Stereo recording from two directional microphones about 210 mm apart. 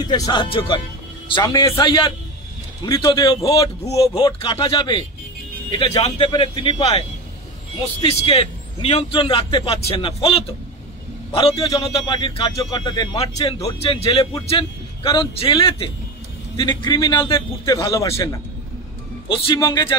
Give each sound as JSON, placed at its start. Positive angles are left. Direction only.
{"t": 0.0, "sound": "a man's voice", "side_deg": 20}